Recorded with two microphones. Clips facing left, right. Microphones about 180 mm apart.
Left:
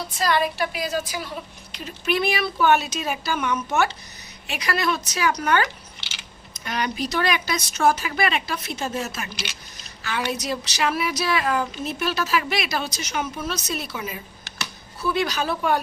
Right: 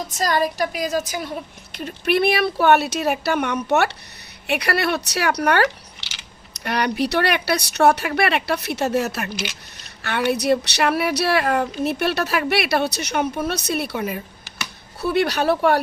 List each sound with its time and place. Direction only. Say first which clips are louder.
0.1 s a woman's voice: right 1 dB; 40° right (ahead or behind)
1.7 s speech: right 4 dB; 55° right (ahead or behind)